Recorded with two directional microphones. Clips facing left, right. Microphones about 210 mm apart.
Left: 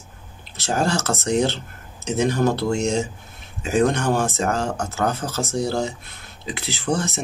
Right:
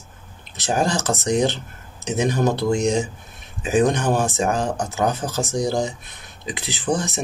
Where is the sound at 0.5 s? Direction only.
15° right (ahead or behind).